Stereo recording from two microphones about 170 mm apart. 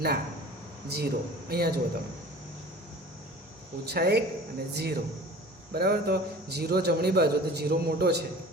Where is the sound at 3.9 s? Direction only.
70° right (ahead or behind).